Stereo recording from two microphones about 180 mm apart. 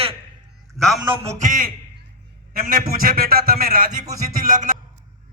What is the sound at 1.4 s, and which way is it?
A man's voice, 50° right (ahead or behind).